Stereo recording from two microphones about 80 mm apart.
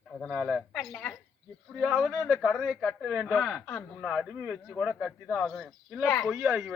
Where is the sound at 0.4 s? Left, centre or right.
Centre.